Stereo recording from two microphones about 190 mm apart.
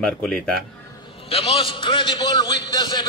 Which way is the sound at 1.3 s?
30° left (ahead or behind).